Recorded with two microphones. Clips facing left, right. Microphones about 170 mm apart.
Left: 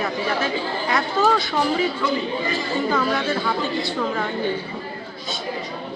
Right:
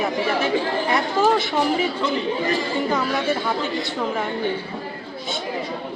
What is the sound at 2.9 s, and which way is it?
A woman's voice, 20° right (ahead or behind).